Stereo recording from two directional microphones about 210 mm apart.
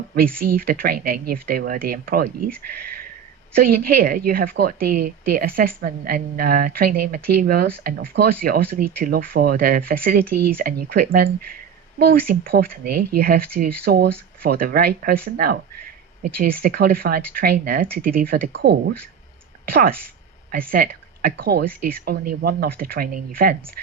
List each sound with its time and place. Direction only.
0.5 s a woman's voice: 45° right (ahead or behind)
3.5 s a woman's voice: 45° right (ahead or behind)
20.5 s a woman's voice: 45° right (ahead or behind)